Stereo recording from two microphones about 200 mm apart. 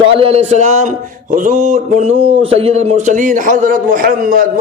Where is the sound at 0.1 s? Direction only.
30° right (ahead or behind).